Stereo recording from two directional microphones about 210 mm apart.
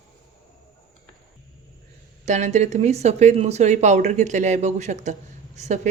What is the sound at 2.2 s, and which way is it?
A woman's voice, 35° right (ahead or behind).